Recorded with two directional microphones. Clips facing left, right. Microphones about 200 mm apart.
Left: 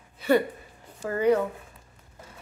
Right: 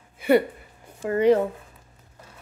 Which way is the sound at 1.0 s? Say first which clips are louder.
Right 4 dB; 25° right (ahead or behind).